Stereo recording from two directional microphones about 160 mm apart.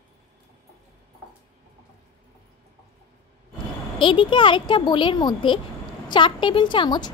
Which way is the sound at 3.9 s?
30° left (ahead or behind).